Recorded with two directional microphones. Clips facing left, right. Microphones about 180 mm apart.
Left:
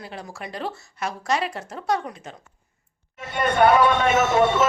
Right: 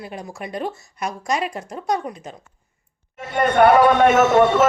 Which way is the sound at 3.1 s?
55° right (ahead or behind).